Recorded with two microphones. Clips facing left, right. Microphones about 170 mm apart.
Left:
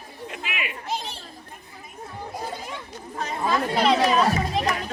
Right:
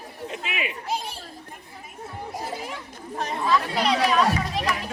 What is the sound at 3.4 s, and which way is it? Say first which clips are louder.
Chatter: left 2 dB; 45° left (ahead or behind).